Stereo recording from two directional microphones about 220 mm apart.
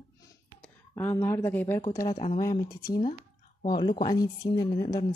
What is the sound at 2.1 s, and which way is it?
Speech, 25° left (ahead or behind).